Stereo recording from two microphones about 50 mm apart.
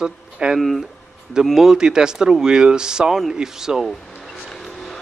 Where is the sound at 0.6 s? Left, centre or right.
Centre.